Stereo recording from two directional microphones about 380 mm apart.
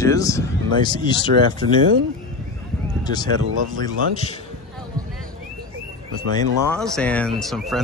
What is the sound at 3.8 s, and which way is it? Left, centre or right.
Speech, centre.